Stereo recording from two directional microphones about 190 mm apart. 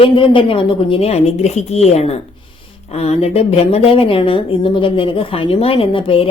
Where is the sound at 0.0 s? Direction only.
30° left (ahead or behind).